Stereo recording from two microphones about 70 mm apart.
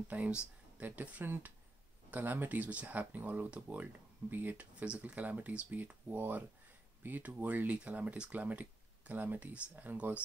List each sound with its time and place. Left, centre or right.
0.1 s speech: right